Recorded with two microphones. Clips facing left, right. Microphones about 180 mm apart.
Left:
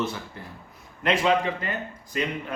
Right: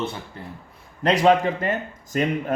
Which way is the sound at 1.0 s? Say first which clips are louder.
Right 5 dB; 40° right (ahead or behind).